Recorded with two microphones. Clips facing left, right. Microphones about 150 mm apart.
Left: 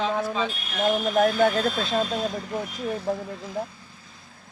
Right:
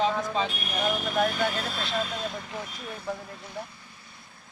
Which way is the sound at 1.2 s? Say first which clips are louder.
Left 6 dB; 45° left (ahead or behind).